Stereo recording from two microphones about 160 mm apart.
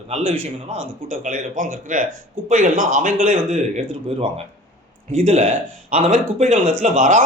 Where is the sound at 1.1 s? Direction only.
55° right (ahead or behind).